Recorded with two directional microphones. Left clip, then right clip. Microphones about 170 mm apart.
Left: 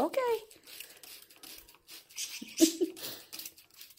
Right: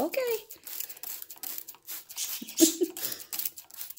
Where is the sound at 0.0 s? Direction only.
5° right (ahead or behind).